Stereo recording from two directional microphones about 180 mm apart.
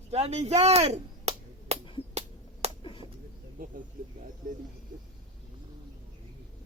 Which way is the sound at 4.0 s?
50° right (ahead or behind).